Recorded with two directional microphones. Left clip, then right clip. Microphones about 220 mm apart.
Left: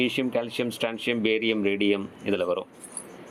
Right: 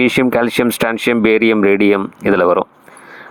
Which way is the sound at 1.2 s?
75° right (ahead or behind).